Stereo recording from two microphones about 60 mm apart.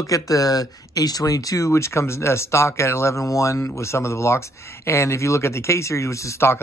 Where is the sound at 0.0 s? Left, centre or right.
Left.